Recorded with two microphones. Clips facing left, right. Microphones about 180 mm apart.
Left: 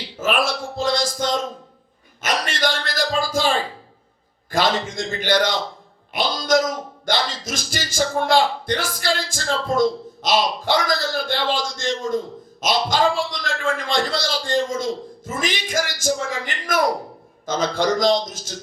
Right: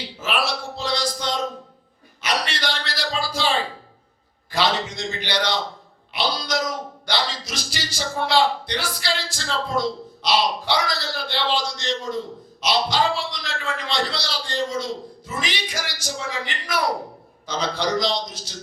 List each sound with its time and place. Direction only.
0.2 s a sound: 50° left (ahead or behind)
4.5 s a man's voice: 50° left (ahead or behind)
6.1 s music: 50° left (ahead or behind)